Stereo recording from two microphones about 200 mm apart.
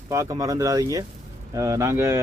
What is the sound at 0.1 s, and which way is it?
Speech, 15° right (ahead or behind).